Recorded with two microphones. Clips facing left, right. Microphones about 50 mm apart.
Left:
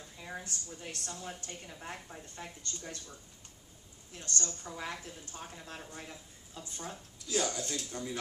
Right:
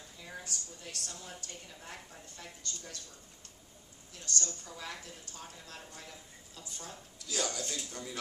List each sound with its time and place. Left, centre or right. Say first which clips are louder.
0.2 s speech: left 2 dB; left
4.1 s speech: even; left